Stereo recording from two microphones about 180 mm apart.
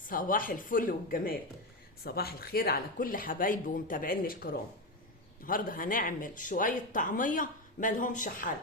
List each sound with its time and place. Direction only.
0.1 s speech: 50° left (ahead or behind)